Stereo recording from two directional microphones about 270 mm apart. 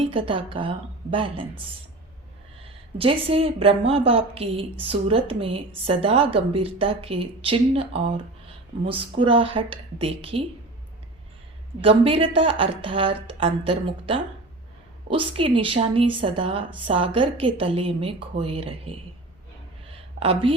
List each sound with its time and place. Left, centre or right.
0.0 s a woman's voice: centre
3.0 s a woman's voice: centre
11.8 s a woman's voice: right
15.4 s a woman's voice: centre
19.9 s a sound: centre